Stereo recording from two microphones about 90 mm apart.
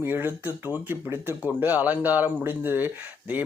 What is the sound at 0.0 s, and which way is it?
Speech, 25° right (ahead or behind).